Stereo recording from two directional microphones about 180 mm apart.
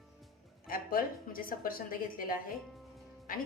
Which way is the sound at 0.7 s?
50° left (ahead or behind).